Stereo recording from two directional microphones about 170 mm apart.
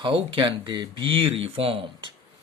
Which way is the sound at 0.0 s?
30° right (ahead or behind).